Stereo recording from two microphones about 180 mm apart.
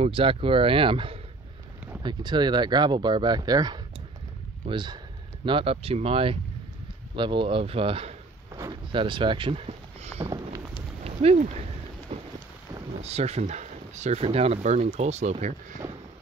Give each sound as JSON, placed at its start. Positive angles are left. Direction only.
{"t": 0.0, "sound": "speech", "side_deg": -30}
{"t": 12.1, "sound": "rain", "side_deg": -35}
{"t": 13.0, "sound": "speech", "side_deg": -35}